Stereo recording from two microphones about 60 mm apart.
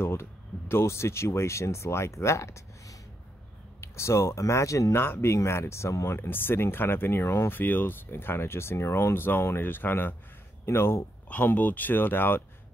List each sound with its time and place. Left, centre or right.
0.0 s speech: left
4.9 s speech: left
5.3 s speech: left
6.1 s speech: left
10.6 s speech: left
11.2 s speech: left